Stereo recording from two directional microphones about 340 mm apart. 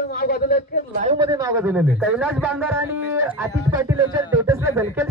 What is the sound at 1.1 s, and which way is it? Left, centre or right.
A man's voice, centre.